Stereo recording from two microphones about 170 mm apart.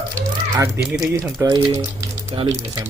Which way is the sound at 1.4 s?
25° right (ahead or behind).